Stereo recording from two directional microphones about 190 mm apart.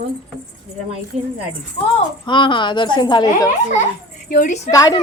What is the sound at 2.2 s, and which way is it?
Speech, 25° left (ahead or behind).